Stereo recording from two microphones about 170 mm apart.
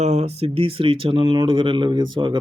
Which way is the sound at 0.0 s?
40° right (ahead or behind).